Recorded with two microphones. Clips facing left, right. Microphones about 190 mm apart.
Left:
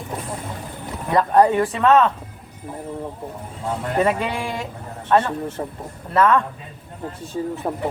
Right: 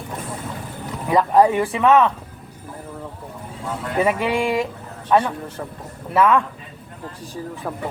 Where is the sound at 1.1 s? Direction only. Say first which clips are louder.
Even; 10° right (ahead or behind).